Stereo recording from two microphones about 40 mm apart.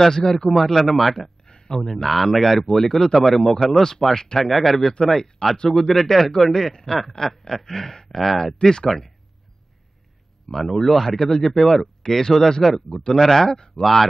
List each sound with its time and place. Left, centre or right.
0.0 s speech: centre
1.4 s a sound: left
1.8 s speech: centre
8.6 s speech: centre
10.5 s speech: centre